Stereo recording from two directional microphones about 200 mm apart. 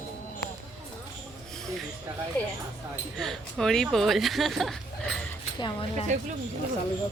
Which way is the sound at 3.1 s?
Centre (ahead or behind).